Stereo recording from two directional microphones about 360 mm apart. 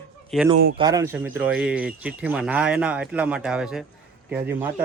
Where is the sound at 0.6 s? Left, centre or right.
Right.